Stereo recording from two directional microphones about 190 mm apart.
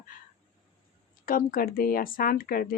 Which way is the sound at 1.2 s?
50° left (ahead or behind).